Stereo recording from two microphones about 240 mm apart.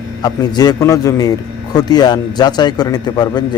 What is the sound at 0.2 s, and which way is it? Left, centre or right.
A man's voice, centre.